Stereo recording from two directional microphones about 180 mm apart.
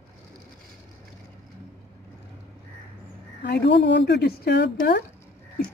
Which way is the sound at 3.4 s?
70° left (ahead or behind).